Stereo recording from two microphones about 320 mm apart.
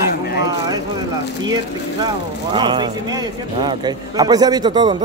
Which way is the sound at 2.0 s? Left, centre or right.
Centre.